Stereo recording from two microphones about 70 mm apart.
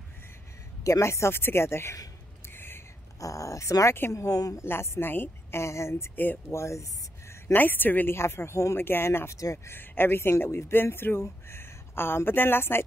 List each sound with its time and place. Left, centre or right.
0.8 s speech: left
2.4 s a sound: left
3.2 s speech: left
4.6 s speech: left
7.5 s speech: left